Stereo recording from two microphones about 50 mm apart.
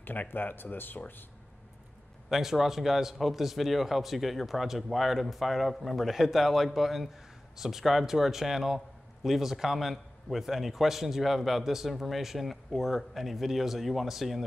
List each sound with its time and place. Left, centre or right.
0.0 s speech: left
2.2 s a man's voice: centre